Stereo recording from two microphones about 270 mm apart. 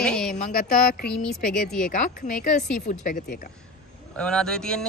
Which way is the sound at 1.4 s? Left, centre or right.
Left.